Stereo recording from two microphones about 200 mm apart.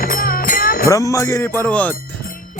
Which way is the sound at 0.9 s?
15° left (ahead or behind).